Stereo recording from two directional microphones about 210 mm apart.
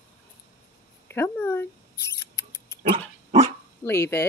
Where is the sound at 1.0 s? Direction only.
10° left (ahead or behind).